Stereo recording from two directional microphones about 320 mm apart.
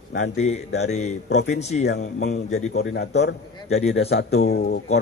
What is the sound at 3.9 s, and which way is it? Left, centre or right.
A man's voice, left.